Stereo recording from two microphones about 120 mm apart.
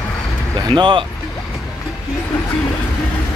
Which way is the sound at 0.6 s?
40° right (ahead or behind).